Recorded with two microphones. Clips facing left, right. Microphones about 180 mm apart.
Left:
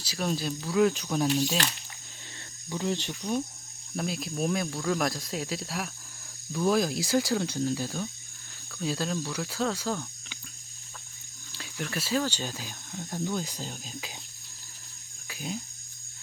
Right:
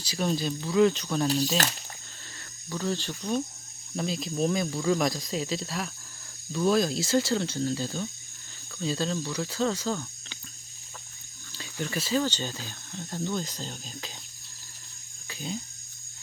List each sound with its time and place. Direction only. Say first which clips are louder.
0.0 s speech: right 2 dB; centre (ahead or behind)
2.6 s speech: even; 20° left (ahead or behind)
3.9 s speech: right 2 dB; 5° left (ahead or behind)
11.5 s speech: right 2 dB; centre (ahead or behind)
15.3 s speech: right 1 dB; 5° left (ahead or behind)